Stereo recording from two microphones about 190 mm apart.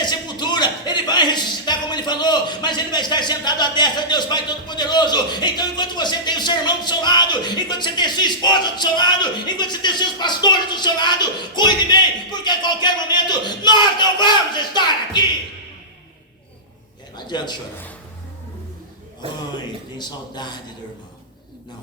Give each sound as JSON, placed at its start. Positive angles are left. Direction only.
{"t": 0.0, "sound": "a man's voice", "side_deg": 20}
{"t": 17.2, "sound": "a man's voice", "side_deg": 20}
{"t": 19.5, "sound": "a man's voice", "side_deg": 20}